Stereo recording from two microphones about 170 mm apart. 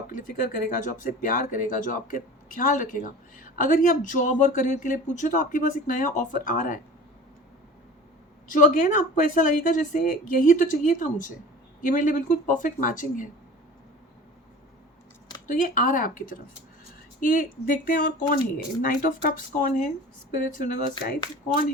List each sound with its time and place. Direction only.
0.1 s speech: 50° left (ahead or behind)
8.4 s speech: 50° left (ahead or behind)
15.4 s speech: 50° left (ahead or behind)